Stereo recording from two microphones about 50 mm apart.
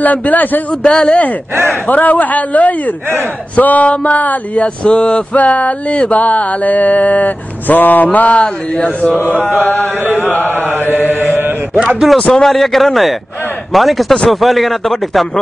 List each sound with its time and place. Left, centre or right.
0.0 s a man's voice: left
0.8 s mantra: centre
1.5 s speech: right
1.9 s a man's voice: left
3.5 s mantra: left
4.6 s mantra: centre
9.6 s a man's voice: left
10.6 s mantra: right
12.4 s speech: centre